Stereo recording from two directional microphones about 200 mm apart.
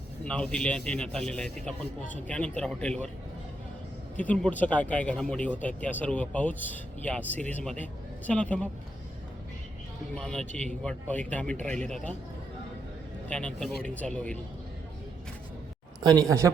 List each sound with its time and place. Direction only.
0.3 s a man's voice: 5° left (ahead or behind)
4.2 s speech: 5° left (ahead or behind)
10.2 s a man's voice: 5° left (ahead or behind)
13.3 s a man's voice: 5° left (ahead or behind)
16.0 s a man's voice: 20° right (ahead or behind)